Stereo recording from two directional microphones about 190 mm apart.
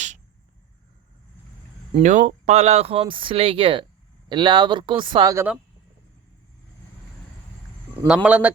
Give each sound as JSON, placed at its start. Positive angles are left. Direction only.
{"t": 1.9, "sound": "speech", "side_deg": -40}
{"t": 8.0, "sound": "speech", "side_deg": -5}